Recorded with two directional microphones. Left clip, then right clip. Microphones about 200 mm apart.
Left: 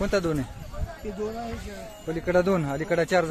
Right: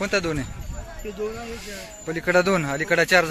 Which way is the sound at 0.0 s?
15° left (ahead or behind).